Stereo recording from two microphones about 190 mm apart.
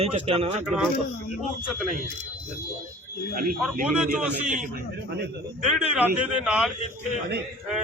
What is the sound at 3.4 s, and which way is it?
Speech, 50° right (ahead or behind).